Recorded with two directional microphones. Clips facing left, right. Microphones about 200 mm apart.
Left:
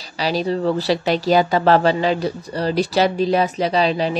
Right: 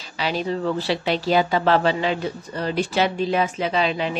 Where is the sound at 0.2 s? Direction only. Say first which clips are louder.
Left 4 dB; 35° left (ahead or behind).